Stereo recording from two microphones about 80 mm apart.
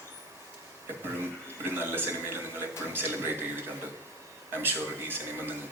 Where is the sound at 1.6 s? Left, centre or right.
Right.